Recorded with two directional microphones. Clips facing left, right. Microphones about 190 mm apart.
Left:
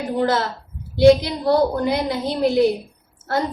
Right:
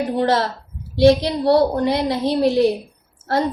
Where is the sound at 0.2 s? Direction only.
30° right (ahead or behind).